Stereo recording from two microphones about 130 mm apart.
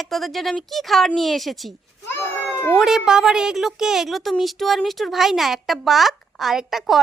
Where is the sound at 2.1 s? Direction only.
20° left (ahead or behind).